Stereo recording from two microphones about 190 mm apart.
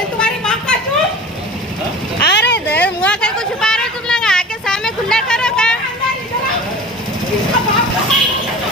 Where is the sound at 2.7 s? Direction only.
5° left (ahead or behind).